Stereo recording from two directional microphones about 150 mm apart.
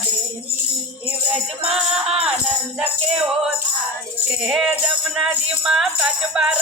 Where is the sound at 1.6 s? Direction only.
40° right (ahead or behind).